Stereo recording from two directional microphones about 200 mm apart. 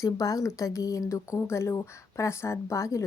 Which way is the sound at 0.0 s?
15° left (ahead or behind).